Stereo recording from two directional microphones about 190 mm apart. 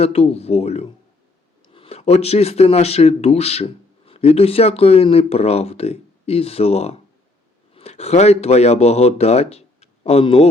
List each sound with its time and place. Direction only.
0.0 s speech: 30° left (ahead or behind)